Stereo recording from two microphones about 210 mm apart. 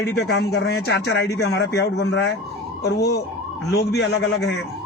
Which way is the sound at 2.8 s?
50° left (ahead or behind).